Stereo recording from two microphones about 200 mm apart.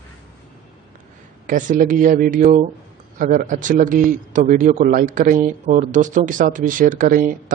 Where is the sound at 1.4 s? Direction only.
40° right (ahead or behind).